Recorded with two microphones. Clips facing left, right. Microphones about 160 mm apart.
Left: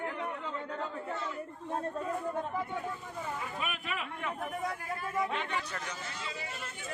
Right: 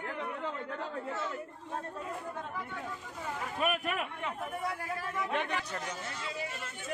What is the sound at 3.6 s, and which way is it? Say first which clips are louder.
Speech: right 6 dB; 50° right (ahead or behind).